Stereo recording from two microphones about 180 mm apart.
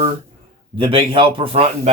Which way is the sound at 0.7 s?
30° right (ahead or behind).